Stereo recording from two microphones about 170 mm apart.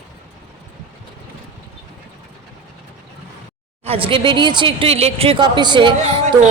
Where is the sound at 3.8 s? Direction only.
30° right (ahead or behind).